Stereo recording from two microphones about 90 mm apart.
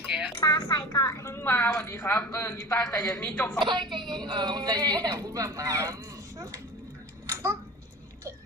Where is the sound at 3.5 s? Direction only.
60° right (ahead or behind); by 6.6 s 35° right (ahead or behind).